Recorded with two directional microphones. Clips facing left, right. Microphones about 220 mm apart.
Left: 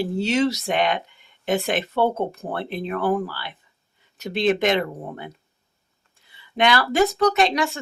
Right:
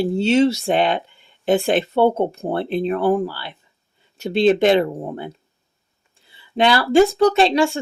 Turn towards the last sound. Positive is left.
turn(degrees=-30)  # may be behind; listen again after turning